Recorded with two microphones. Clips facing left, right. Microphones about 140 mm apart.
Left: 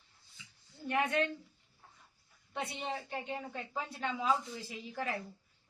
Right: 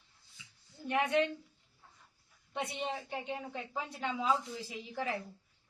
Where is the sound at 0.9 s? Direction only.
15° right (ahead or behind).